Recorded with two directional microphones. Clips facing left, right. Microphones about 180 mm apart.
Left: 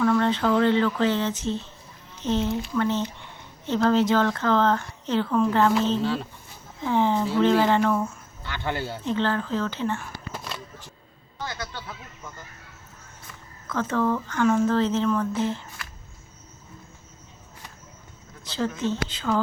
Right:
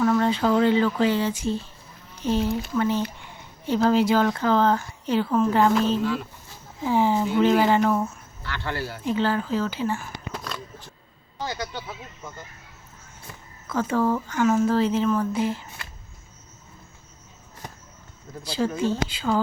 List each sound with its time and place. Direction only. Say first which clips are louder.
0.0 s a woman's voice: right 1 dB; 5° right (ahead or behind)
6.0 s speech: even; 30° left (ahead or behind)
6.8 s a woman's voice: right 1 dB; 10° right (ahead or behind)
8.4 s speech: left 1 dB; 20° left (ahead or behind)
9.0 s a woman's voice: right 2 dB; 10° right (ahead or behind)
10.3 s a sound: right 2 dB; 5° left (ahead or behind)
11.3 s speech: right 3 dB; 20° right (ahead or behind)
13.7 s a woman's voice: right 1 dB; 10° right (ahead or behind)
18.4 s a woman's voice: right 2 dB; 10° right (ahead or behind)